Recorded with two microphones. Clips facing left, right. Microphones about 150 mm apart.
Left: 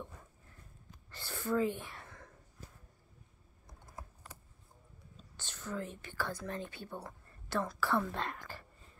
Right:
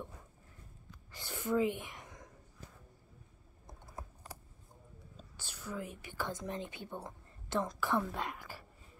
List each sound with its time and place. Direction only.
1.1 s whispering: 15° right (ahead or behind)
5.4 s speech: 10° right (ahead or behind)